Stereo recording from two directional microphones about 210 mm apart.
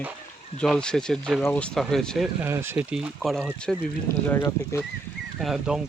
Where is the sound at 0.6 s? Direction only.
5° left (ahead or behind).